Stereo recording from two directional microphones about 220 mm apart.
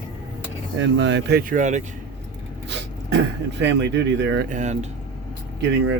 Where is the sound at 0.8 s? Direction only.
55° right (ahead or behind).